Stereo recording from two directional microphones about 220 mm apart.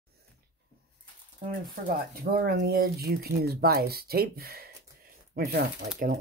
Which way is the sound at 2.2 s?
45° right (ahead or behind).